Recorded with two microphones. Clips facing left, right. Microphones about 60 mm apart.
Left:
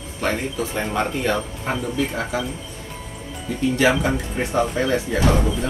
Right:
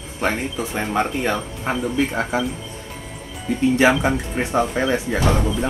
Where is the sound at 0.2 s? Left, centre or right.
Right.